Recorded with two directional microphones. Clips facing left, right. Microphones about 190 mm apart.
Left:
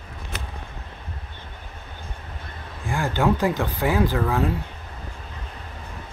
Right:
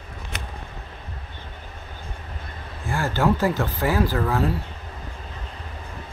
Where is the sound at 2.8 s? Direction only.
15° left (ahead or behind).